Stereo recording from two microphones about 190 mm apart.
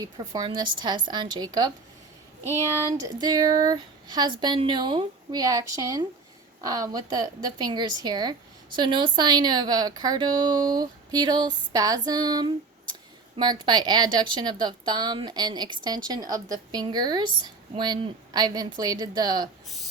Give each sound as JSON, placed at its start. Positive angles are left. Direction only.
{"t": 0.0, "sound": "a woman's voice", "side_deg": -20}
{"t": 3.0, "sound": "a woman's voice", "side_deg": -20}